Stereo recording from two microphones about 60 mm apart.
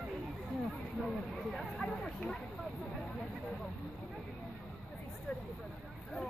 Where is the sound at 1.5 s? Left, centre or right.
Centre.